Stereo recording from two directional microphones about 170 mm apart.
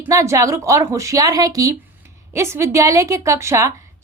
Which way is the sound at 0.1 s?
20° right (ahead or behind).